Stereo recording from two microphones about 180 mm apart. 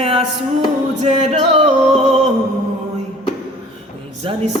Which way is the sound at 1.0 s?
35° right (ahead or behind).